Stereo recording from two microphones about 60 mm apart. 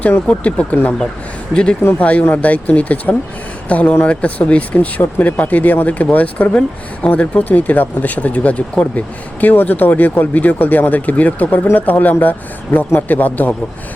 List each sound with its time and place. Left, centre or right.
0.0 s speech: left
1.8 s speech: left